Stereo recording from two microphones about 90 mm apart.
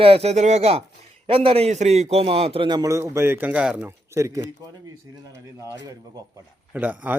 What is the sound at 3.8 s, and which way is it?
Speech, 30° right (ahead or behind).